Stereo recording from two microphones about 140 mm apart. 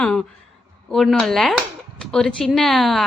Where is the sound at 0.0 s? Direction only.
5° left (ahead or behind).